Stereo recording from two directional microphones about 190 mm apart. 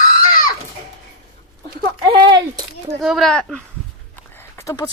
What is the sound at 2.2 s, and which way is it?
Speech, 25° right (ahead or behind).